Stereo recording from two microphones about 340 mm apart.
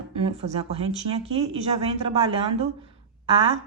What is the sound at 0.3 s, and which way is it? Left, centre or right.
Speech, centre.